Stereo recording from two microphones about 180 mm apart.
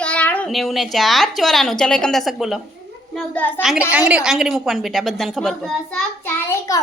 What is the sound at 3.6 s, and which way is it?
A woman's voice, 5° right (ahead or behind).